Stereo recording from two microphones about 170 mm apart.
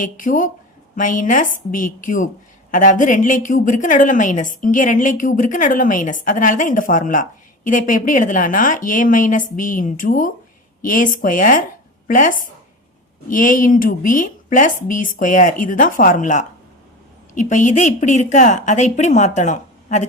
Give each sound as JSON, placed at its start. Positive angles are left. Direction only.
{"t": 0.0, "sound": "a woman's voice", "side_deg": 50}